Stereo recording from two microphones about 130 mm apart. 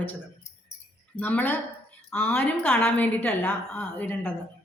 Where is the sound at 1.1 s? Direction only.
15° left (ahead or behind).